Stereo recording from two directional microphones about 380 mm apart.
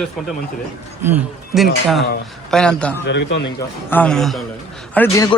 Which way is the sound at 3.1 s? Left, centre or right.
Left.